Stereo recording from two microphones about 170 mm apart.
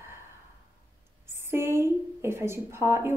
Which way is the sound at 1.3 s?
15° right (ahead or behind).